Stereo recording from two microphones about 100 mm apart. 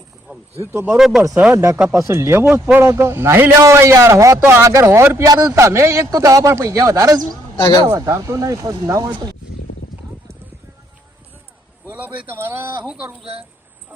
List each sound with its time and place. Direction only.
0.6 s a man's voice: 25° right (ahead or behind)
0.9 s speech: 5° right (ahead or behind)
1.5 s a man's voice: 30° right (ahead or behind)
7.5 s speech: 65° left (ahead or behind)
7.8 s speech: 50° right (ahead or behind)
8.0 s a man's voice: 35° right (ahead or behind)
11.9 s speech: 15° right (ahead or behind)